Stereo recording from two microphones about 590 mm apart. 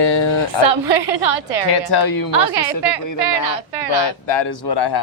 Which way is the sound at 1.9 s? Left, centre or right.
Left.